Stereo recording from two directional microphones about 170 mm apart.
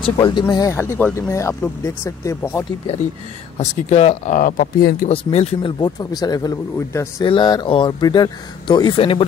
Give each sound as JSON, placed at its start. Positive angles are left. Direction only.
{"t": 0.0, "sound": "speech", "side_deg": 30}
{"t": 3.5, "sound": "speech", "side_deg": 40}
{"t": 5.0, "sound": "speech", "side_deg": 40}